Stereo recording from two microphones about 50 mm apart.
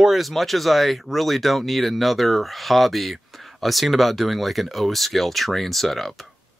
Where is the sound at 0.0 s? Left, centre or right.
Centre.